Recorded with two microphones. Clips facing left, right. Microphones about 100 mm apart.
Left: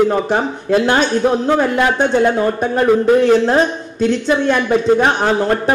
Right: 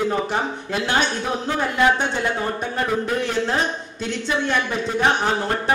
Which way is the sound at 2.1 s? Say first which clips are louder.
Left 10 dB; 50° left (ahead or behind).